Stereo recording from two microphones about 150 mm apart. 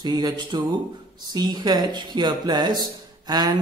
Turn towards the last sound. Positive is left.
turn(degrees=-25)  # may be behind; listen again after turning